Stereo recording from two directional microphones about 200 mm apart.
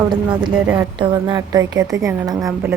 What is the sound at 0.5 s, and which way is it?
Speech, 10° right (ahead or behind).